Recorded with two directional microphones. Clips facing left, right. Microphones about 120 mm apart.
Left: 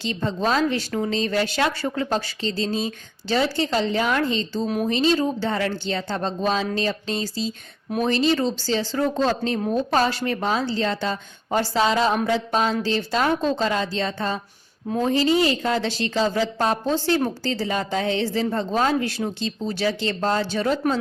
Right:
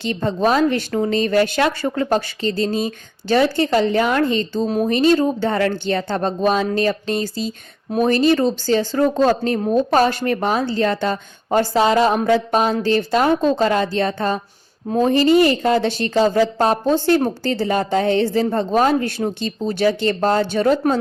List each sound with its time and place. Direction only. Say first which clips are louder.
0.0 s speech: right 5 dB; 55° right (ahead or behind)
4.6 s speech: right 4 dB; 30° right (ahead or behind)
4.9 s a woman's voice: right 5 dB; 55° right (ahead or behind)